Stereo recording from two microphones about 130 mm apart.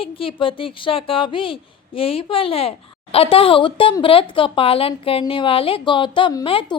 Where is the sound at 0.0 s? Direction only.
45° left (ahead or behind).